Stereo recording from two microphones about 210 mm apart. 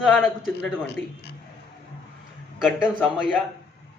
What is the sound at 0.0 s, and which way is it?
Speech, centre (ahead or behind).